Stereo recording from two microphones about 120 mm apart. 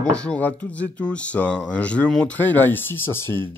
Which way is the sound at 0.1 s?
10° left (ahead or behind).